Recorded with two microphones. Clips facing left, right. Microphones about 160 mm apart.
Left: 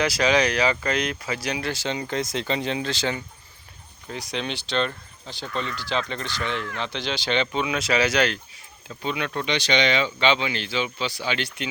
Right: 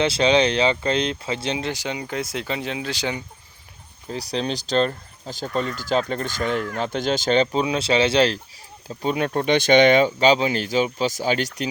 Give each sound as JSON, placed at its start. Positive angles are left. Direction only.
{"t": 0.0, "sound": "speech", "side_deg": -25}
{"t": 4.1, "sound": "speech", "side_deg": -35}
{"t": 8.9, "sound": "speech", "side_deg": -40}